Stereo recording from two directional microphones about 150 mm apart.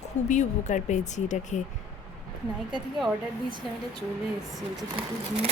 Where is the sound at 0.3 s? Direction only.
55° left (ahead or behind).